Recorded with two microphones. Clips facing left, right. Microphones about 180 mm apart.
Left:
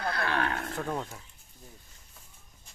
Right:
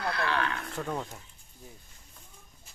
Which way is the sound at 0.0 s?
45° left (ahead or behind).